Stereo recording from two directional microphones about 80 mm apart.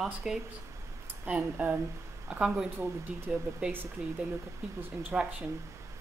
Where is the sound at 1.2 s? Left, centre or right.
Centre.